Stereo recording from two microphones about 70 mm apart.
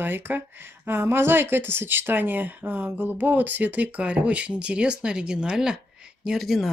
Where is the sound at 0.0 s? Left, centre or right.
Right.